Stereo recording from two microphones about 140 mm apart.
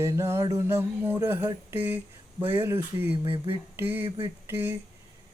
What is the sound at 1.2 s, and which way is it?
Mantra, 15° right (ahead or behind).